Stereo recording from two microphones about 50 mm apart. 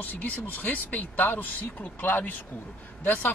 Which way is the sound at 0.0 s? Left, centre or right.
Left.